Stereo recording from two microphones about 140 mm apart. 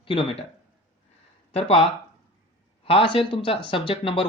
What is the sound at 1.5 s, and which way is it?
Speech, 45° left (ahead or behind).